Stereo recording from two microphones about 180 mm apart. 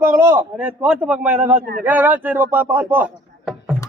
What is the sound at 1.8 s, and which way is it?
Music, 10° right (ahead or behind).